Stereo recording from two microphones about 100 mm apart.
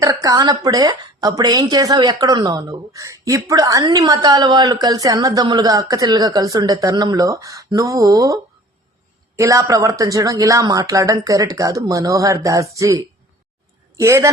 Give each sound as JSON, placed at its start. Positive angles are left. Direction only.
{"t": 0.0, "sound": "a woman's voice", "side_deg": -35}